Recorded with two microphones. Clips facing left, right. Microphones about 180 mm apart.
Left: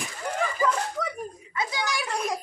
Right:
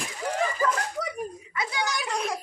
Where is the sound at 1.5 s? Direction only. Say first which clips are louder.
Left 6 dB; 25° left (ahead or behind).